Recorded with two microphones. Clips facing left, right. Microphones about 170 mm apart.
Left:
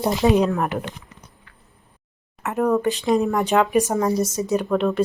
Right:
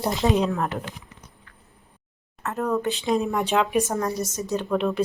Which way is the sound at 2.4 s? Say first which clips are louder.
Left 5 dB; 15° left (ahead or behind).